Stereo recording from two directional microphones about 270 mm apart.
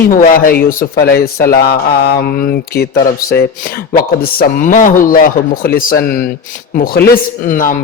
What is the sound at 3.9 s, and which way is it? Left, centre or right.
A man's voice, left.